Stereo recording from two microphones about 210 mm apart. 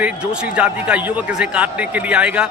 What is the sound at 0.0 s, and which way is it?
A man's voice, 5° right (ahead or behind).